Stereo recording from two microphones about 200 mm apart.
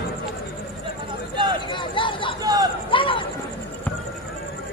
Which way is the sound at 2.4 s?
20° right (ahead or behind).